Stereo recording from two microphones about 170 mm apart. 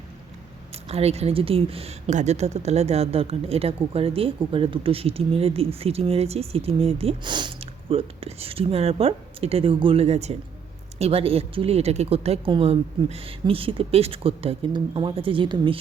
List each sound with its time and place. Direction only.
0.9 s speech: 35° right (ahead or behind)